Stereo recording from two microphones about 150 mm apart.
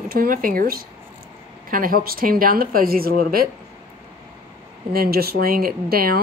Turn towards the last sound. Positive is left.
turn(degrees=-85)